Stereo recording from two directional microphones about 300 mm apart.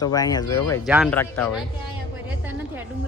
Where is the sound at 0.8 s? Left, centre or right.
Centre.